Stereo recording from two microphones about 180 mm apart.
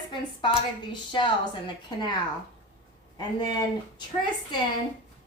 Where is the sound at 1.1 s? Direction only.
25° left (ahead or behind).